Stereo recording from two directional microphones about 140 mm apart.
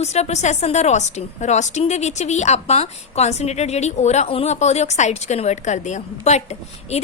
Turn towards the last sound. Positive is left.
turn(degrees=50)  # may be behind; listen again after turning